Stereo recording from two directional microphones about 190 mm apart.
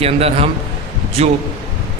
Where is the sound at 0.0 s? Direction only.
30° right (ahead or behind).